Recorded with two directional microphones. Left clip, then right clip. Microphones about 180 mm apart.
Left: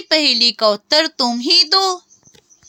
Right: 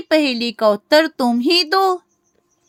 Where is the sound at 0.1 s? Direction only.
45° right (ahead or behind).